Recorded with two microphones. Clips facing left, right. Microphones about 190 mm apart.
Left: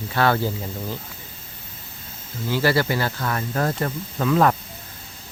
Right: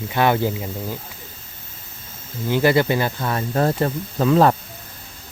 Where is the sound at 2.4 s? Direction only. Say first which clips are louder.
Right 4 dB; 20° right (ahead or behind).